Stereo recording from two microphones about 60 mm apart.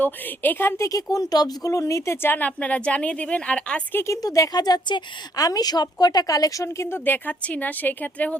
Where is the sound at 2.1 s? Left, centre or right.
Left; by 3.8 s centre.